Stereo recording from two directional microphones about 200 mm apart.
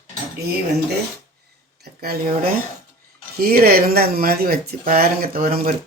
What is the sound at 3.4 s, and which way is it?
Speech, 50° right (ahead or behind).